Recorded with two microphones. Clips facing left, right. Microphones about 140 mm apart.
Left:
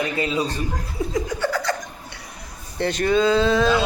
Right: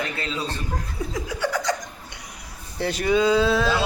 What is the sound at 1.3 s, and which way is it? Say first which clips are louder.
Laughter: left 1 dB; 15° right (ahead or behind).